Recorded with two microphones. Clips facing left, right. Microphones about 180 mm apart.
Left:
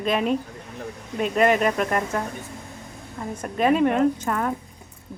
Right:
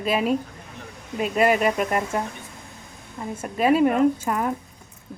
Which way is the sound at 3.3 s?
5° right (ahead or behind).